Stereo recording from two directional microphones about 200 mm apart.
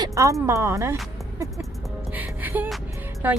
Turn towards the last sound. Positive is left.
turn(degrees=-10)  # may be behind; listen again after turning